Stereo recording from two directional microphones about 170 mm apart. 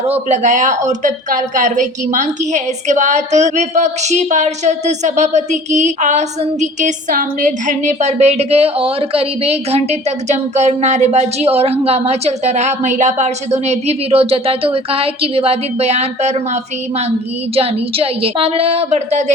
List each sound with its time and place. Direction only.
0.1 s a woman's voice: 45° right (ahead or behind)
17.5 s a woman's voice: 35° right (ahead or behind)